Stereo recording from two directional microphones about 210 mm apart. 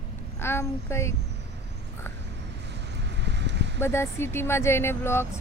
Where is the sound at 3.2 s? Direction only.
55° right (ahead or behind).